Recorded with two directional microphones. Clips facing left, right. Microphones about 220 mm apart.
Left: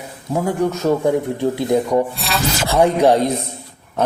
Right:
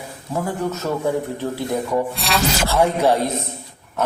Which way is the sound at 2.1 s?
Centre (ahead or behind).